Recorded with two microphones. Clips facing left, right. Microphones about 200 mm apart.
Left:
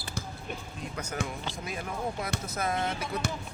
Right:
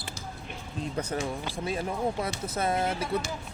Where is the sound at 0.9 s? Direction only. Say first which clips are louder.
Right 3 dB; 30° right (ahead or behind).